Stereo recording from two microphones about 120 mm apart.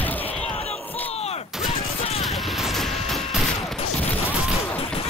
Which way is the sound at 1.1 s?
60° left (ahead or behind).